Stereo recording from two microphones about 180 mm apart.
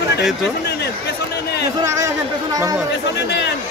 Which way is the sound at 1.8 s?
15° right (ahead or behind).